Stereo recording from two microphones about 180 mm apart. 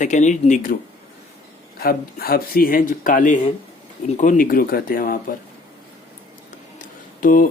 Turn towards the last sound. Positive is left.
turn(degrees=50)  # may be behind; listen again after turning